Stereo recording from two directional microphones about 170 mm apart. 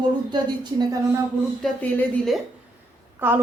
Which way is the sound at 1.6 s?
10° left (ahead or behind).